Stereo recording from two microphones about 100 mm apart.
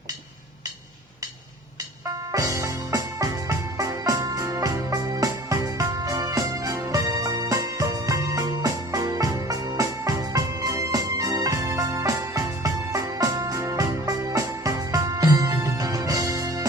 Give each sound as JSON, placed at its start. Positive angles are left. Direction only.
{"t": 2.3, "sound": "music", "side_deg": -35}